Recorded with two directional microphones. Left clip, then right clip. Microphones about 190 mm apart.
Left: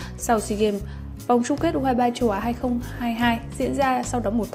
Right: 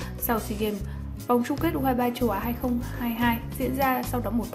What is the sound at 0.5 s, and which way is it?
A woman's voice, 20° left (ahead or behind).